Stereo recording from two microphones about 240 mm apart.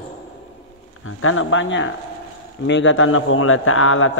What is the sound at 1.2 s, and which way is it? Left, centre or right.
A man's voice, left.